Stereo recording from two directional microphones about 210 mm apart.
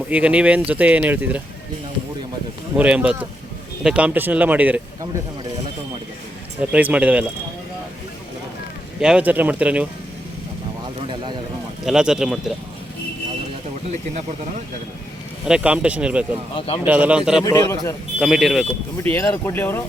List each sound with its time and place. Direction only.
0.1 s speech: 5° right (ahead or behind)
2.7 s speech: 5° right (ahead or behind)
6.6 s speech: 5° right (ahead or behind)
9.0 s speech: 5° right (ahead or behind)
11.9 s speech: 5° right (ahead or behind)
15.4 s speech: 5° right (ahead or behind)
16.6 s speech: 25° left (ahead or behind)
16.8 s speech: 5° right (ahead or behind)
17.4 s speech: 15° left (ahead or behind)
18.2 s speech: centre (ahead or behind)
19.0 s speech: 10° left (ahead or behind)